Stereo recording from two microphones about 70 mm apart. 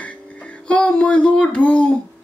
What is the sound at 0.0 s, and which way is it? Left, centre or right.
Music, centre.